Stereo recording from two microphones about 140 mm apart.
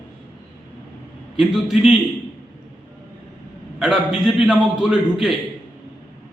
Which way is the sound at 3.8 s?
Centre (ahead or behind).